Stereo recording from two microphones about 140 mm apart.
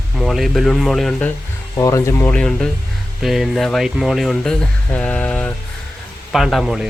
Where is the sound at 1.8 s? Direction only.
25° left (ahead or behind); by 6.9 s centre (ahead or behind).